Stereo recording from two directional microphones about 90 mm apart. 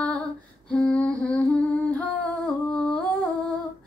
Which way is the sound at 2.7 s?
10° left (ahead or behind).